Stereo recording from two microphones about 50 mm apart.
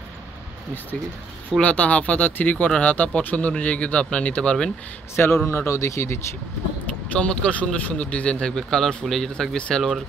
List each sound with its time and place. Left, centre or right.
1.6 s speech: left
5.1 s a man's voice: left
7.2 s a man's voice: left